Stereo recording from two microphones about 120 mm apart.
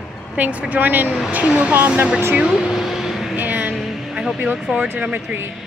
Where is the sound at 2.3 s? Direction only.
5° right (ahead or behind).